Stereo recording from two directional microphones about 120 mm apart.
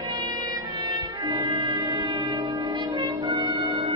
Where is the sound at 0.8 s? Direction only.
40° right (ahead or behind).